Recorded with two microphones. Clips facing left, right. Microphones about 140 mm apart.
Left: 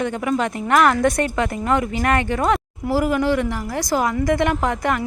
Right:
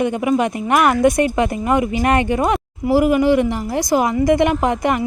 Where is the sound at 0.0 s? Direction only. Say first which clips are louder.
Right 4 dB; 15° right (ahead or behind).